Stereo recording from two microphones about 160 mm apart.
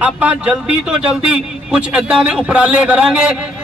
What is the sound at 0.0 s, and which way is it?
A man's voice, 10° right (ahead or behind).